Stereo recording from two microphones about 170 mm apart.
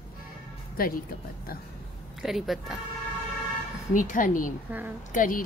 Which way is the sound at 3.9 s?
50° left (ahead or behind).